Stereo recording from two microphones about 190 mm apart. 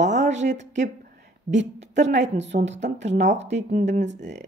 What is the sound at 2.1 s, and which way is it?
Speech, 70° right (ahead or behind).